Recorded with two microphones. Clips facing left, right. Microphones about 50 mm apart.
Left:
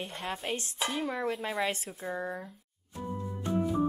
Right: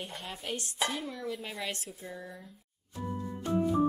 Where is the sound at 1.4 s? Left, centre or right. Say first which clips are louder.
Left 6 dB; centre.